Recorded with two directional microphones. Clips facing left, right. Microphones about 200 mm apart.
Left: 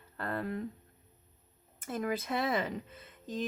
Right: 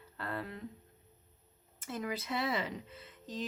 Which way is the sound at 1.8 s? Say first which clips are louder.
Left 4 dB; 50° left (ahead or behind).